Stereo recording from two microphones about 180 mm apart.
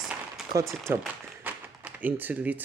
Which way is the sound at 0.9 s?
10° right (ahead or behind).